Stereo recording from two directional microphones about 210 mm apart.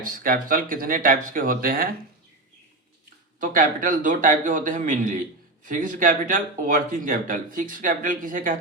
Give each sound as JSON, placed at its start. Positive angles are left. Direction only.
{"t": 0.0, "sound": "speech", "side_deg": -40}
{"t": 3.4, "sound": "speech", "side_deg": -40}